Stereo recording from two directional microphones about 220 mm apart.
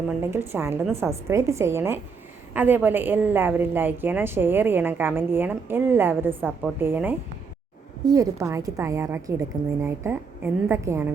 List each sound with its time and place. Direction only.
0.2 s a woman's voice: 10° right (ahead or behind)